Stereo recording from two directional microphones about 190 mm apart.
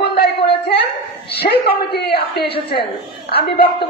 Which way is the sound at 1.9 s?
60° left (ahead or behind).